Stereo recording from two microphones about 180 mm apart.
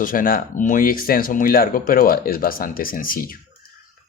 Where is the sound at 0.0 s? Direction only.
50° left (ahead or behind).